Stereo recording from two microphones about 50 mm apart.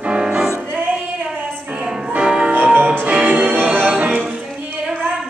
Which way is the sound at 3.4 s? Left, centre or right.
Right.